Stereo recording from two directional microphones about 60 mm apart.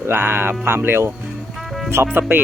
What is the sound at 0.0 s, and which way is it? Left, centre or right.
Speech, right.